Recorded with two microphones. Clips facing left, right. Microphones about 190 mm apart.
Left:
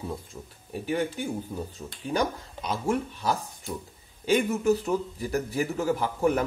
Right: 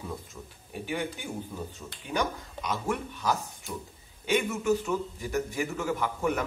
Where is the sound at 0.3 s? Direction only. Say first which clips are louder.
Left 3 dB; 30° left (ahead or behind).